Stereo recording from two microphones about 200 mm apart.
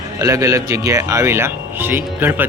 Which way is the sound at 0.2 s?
15° right (ahead or behind).